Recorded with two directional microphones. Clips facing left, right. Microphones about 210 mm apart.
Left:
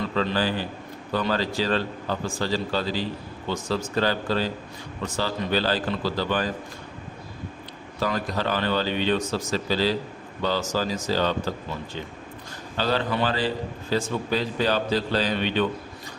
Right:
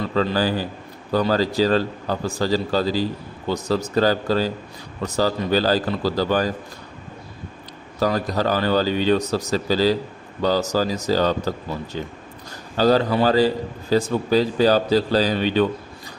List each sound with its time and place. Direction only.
0.2 s a man's voice: 40° right (ahead or behind)
7.9 s a man's voice: 40° right (ahead or behind)